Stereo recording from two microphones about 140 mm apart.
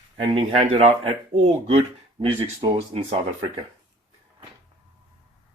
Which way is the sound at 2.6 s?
50° right (ahead or behind).